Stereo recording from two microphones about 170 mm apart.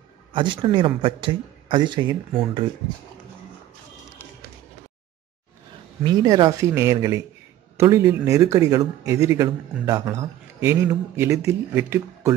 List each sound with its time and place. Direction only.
0.3 s speech: 30° right (ahead or behind)
6.0 s speech: 25° right (ahead or behind)